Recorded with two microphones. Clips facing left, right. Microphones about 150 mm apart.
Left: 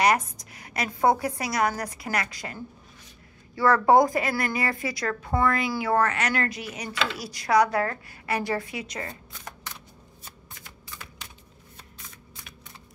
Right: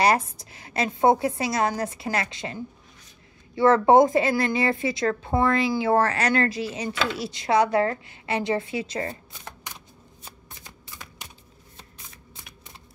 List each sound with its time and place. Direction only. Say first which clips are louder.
0.0 s a woman's voice: right 1 dB; 30° right (ahead or behind)